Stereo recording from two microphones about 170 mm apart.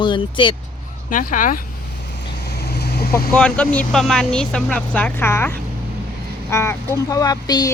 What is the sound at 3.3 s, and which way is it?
Speech, 5° left (ahead or behind).